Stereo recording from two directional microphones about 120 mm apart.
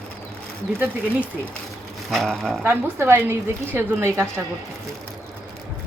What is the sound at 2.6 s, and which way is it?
A woman's voice, 20° right (ahead or behind).